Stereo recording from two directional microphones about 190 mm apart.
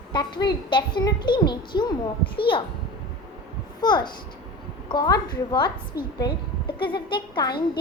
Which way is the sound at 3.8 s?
25° left (ahead or behind).